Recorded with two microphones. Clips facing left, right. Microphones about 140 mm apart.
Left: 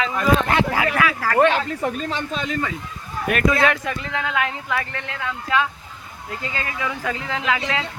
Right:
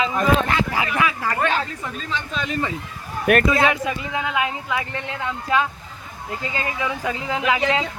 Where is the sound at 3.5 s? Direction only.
5° right (ahead or behind).